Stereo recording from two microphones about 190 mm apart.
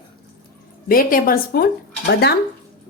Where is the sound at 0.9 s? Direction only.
50° left (ahead or behind).